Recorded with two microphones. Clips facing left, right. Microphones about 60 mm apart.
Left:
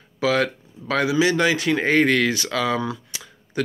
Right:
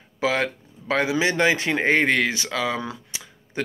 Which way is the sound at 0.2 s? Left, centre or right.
Right.